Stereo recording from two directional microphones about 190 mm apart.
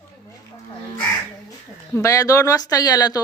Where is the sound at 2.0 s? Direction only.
15° left (ahead or behind).